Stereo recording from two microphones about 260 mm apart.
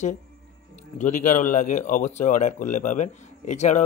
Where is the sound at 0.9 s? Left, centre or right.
Left.